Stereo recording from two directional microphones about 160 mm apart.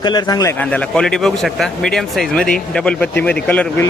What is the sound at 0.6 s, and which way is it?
Speech, 10° left (ahead or behind).